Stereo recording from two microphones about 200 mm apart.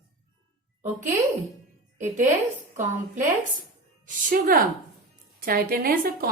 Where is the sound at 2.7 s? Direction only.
40° right (ahead or behind).